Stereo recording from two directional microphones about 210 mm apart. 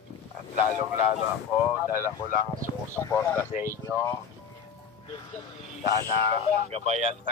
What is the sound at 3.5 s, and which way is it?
Speech, 15° right (ahead or behind).